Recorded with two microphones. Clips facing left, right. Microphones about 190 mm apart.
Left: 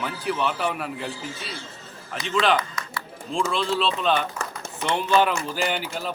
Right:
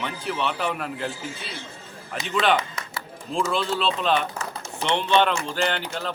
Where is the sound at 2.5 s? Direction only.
25° right (ahead or behind).